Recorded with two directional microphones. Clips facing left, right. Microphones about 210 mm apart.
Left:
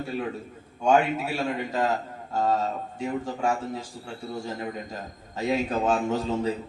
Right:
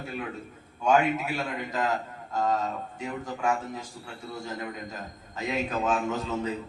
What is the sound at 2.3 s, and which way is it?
A man's voice, 30° left (ahead or behind).